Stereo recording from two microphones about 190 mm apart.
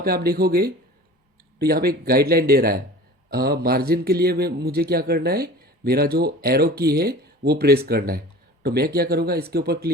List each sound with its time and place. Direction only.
0.0 s a man's voice: 55° right (ahead or behind)